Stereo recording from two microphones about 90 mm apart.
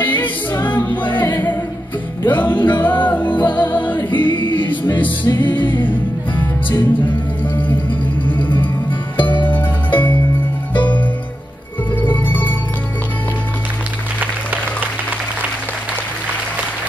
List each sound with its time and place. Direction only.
0.0 s music: 20° left (ahead or behind)
0.6 s a capella: 25° left (ahead or behind)
1.1 s music: 20° left (ahead or behind)
4.5 s a capella: 20° left (ahead or behind)
4.9 s music: 20° left (ahead or behind)
9.5 s music: 20° left (ahead or behind)
12.0 s music: 20° left (ahead or behind)